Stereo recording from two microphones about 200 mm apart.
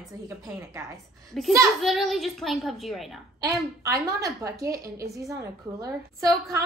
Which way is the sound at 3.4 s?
15° right (ahead or behind).